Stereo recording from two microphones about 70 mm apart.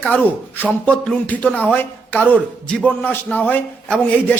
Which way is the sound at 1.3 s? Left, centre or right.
Left.